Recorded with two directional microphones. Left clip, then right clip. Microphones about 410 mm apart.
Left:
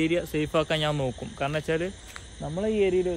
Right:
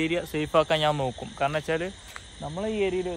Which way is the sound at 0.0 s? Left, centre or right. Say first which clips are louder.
Left 1 dB; centre.